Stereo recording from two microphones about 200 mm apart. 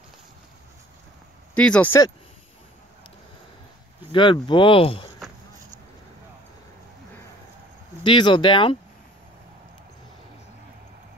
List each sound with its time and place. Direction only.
1.5 s speech: 5° left (ahead or behind)
4.1 s speech: 25° left (ahead or behind)
8.0 s speech: 25° left (ahead or behind)